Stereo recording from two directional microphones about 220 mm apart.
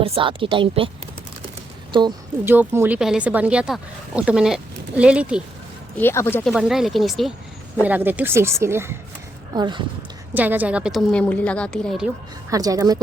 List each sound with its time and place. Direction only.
0.0 s speech: 25° right (ahead or behind)
1.9 s a woman's voice: 20° right (ahead or behind)
2.4 s speech: 10° right (ahead or behind)
6.0 s speech: 10° left (ahead or behind)
6.5 s speech: centre (ahead or behind); by 9.8 s 20° right (ahead or behind)
10.3 s speech: 5° right (ahead or behind)
12.5 s speech: 15° right (ahead or behind)